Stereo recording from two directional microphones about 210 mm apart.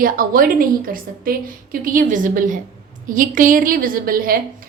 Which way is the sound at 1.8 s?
40° right (ahead or behind).